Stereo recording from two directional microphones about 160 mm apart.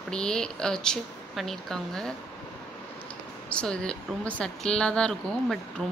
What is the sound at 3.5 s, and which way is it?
A woman's voice, 5° left (ahead or behind).